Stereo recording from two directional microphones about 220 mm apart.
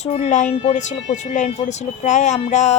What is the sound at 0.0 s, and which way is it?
Speech, 30° left (ahead or behind).